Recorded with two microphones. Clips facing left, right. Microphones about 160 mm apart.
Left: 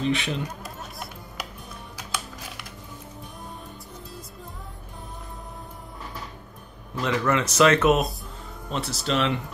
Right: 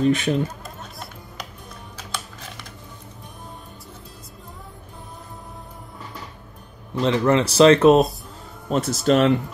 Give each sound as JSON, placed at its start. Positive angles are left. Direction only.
{"t": 0.0, "sound": "speech", "side_deg": -45}
{"t": 7.0, "sound": "speech", "side_deg": -30}
{"t": 8.6, "sound": "speech", "side_deg": -45}